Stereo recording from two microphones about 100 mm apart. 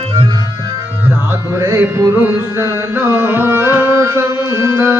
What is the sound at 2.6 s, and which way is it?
Carnatic music, 25° right (ahead or behind).